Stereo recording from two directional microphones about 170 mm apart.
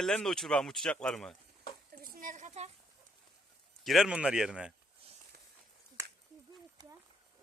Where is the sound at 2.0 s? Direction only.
55° right (ahead or behind).